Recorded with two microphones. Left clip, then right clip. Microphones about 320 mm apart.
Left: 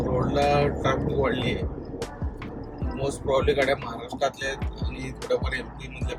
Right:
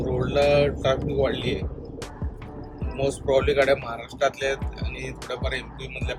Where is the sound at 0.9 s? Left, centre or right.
Right.